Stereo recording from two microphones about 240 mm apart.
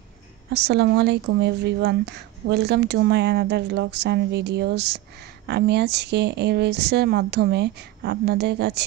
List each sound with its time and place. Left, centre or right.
0.5 s speech: right